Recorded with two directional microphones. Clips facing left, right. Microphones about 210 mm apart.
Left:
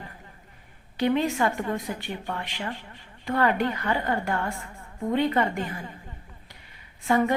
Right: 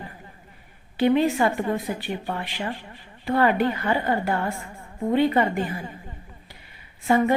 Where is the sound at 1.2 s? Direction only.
15° right (ahead or behind).